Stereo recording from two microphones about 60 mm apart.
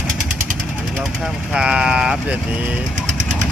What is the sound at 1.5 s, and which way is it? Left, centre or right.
Speech, centre.